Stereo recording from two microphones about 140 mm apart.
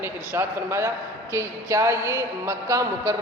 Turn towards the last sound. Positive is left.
turn(degrees=-20)  # may be behind; listen again after turning